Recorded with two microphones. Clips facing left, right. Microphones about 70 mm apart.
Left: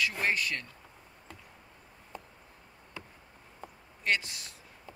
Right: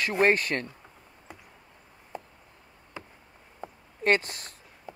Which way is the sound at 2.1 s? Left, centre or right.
Right.